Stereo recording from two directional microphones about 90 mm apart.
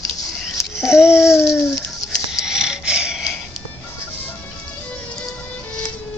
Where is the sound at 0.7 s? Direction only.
5° right (ahead or behind).